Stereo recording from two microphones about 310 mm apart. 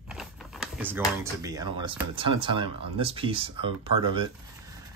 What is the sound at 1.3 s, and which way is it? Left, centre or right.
Speech, centre.